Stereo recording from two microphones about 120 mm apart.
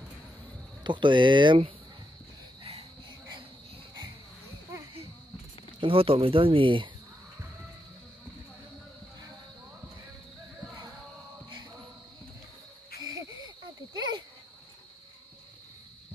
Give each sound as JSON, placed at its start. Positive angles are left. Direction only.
{"t": 0.8, "sound": "speech", "side_deg": -40}
{"t": 5.8, "sound": "speech", "side_deg": -50}
{"t": 13.0, "sound": "cricket", "side_deg": -30}
{"t": 13.9, "sound": "a sound", "side_deg": -40}